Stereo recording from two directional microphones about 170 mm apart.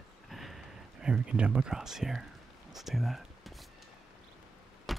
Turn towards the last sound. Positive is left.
turn(degrees=0)  # may be behind; listen again after turning